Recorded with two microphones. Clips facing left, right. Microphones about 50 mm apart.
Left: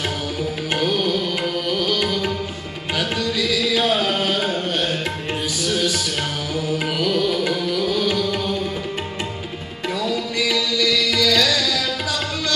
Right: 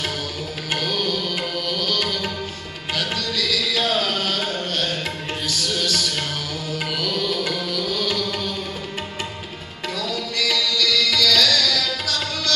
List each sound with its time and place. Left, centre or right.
0.7 s music: centre
9.9 s music: centre